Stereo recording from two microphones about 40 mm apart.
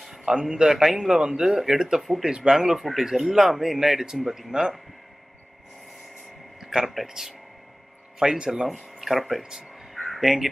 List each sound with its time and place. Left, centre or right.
0.2 s speech: right; by 4.5 s centre
4.5 s speech: centre
6.6 s a sound: centre
7.1 s speech: centre
8.6 s speech: centre
10.0 s crow: centre